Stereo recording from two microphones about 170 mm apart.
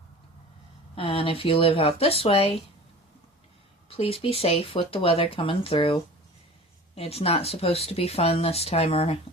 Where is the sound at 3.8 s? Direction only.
35° left (ahead or behind).